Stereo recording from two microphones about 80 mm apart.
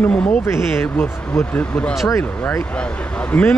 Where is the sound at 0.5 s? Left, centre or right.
Left.